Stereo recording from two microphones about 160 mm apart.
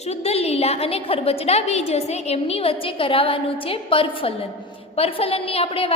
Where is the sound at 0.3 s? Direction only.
40° left (ahead or behind).